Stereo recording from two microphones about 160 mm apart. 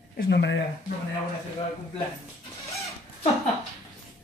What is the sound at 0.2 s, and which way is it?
Speech, 90° left.